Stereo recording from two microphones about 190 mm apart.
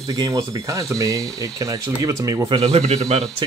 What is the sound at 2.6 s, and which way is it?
Speech, 35° right (ahead or behind).